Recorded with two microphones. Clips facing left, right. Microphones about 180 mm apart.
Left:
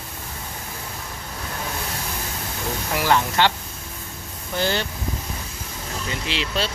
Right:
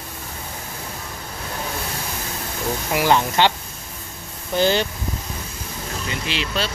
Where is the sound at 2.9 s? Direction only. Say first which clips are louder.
Right 2 dB; 20° right (ahead or behind).